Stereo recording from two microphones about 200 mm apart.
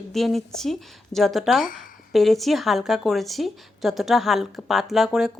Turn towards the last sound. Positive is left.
turn(degrees=0)  # may be behind; listen again after turning